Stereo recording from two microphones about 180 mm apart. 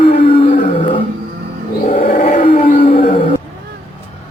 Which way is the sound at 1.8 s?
40° left (ahead or behind).